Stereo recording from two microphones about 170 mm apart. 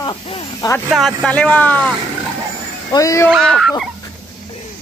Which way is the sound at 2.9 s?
20° left (ahead or behind).